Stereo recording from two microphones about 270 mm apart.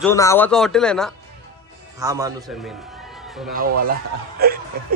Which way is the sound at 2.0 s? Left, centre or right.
Centre.